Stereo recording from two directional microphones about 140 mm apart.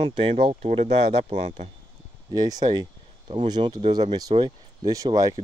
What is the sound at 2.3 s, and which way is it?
Speech, 30° right (ahead or behind).